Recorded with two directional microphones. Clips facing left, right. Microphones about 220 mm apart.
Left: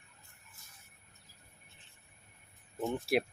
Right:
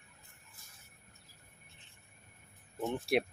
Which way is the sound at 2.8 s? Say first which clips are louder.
Even; centre (ahead or behind).